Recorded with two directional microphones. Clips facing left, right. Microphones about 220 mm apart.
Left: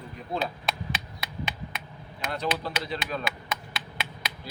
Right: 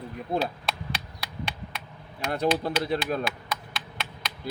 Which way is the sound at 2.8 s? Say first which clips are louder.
Right 6 dB; 50° right (ahead or behind).